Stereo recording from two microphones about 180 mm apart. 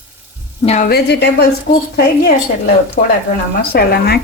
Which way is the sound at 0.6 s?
40° left (ahead or behind).